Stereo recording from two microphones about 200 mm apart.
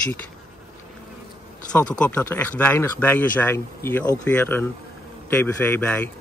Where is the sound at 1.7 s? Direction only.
5° left (ahead or behind).